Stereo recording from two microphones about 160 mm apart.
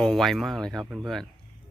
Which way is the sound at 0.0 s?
Centre (ahead or behind).